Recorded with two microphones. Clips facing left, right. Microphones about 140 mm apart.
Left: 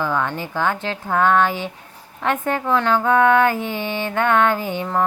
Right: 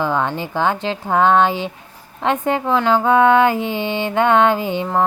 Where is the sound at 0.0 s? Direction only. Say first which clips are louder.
Right 3 dB; 20° right (ahead or behind).